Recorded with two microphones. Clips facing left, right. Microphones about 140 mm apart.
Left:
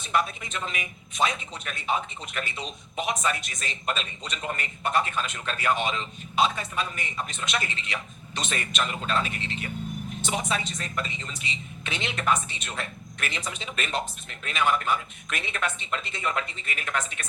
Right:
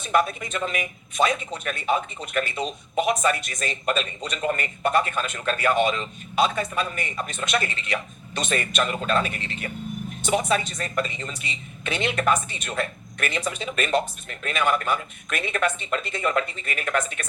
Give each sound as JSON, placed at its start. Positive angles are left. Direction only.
{"t": 0.0, "sound": "speech", "side_deg": -50}